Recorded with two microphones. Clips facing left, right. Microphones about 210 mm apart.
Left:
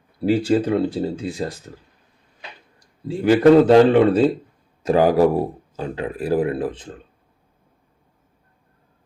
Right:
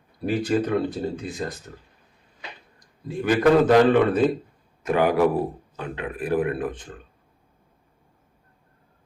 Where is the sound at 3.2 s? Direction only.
25° left (ahead or behind).